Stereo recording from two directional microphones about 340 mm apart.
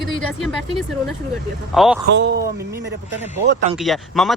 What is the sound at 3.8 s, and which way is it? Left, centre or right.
Speech, centre.